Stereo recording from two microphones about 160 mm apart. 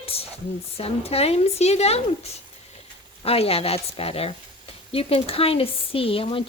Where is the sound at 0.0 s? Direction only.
35° left (ahead or behind).